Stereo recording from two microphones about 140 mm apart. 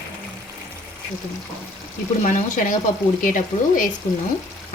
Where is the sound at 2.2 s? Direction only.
65° left (ahead or behind).